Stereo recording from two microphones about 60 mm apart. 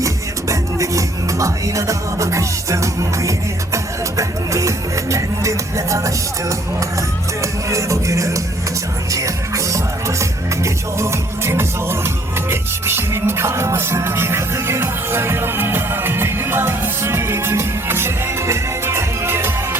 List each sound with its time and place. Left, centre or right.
0.0 s music: right
7.7 s music: right